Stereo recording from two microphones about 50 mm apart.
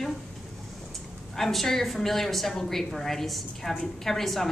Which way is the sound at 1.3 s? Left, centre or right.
Centre.